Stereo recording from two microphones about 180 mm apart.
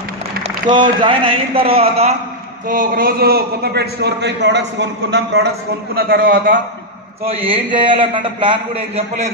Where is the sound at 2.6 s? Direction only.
50° right (ahead or behind); by 5.5 s 75° right (ahead or behind).